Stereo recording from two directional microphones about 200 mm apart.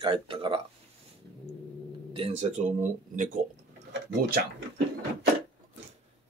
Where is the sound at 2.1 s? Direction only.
30° right (ahead or behind).